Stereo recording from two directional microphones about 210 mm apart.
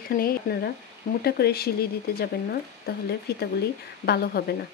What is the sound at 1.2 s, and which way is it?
Speech, 50° left (ahead or behind).